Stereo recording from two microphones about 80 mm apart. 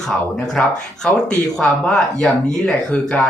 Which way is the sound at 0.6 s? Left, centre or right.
Centre.